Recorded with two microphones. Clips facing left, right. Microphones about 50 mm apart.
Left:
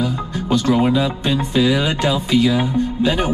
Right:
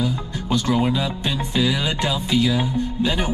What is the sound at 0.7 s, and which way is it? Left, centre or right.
Speech, left.